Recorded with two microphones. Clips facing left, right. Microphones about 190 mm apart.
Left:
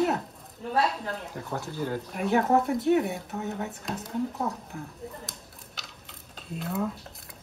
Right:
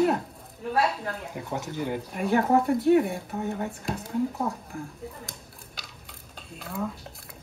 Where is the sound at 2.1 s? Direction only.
Centre (ahead or behind).